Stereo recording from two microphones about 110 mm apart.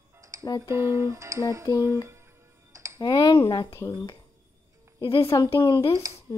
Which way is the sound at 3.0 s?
40° left (ahead or behind).